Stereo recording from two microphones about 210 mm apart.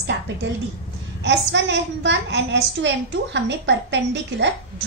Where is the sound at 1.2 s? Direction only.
55° right (ahead or behind).